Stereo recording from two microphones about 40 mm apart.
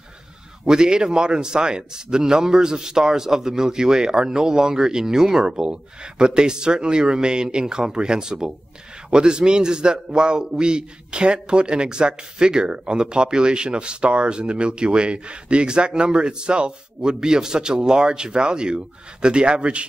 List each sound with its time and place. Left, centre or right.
0.7 s a man's voice: centre